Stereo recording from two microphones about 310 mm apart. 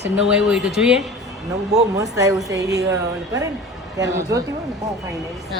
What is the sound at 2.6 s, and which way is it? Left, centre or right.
Speech, right.